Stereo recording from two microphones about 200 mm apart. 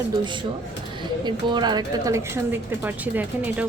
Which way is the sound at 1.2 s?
20° right (ahead or behind).